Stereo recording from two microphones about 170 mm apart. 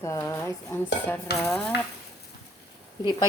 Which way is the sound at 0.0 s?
15° left (ahead or behind).